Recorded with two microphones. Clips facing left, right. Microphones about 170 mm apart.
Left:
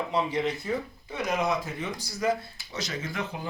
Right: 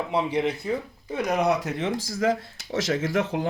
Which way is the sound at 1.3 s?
65° right (ahead or behind).